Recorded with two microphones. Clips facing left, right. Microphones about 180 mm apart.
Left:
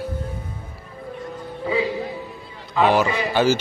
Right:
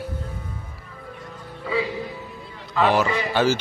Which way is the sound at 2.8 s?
Centre (ahead or behind).